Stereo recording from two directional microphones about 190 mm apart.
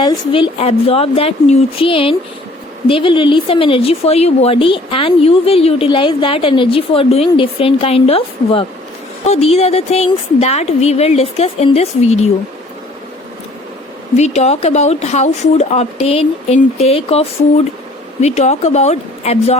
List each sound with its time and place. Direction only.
0.0 s a woman's voice: 25° left (ahead or behind)
14.2 s a woman's voice: 35° left (ahead or behind)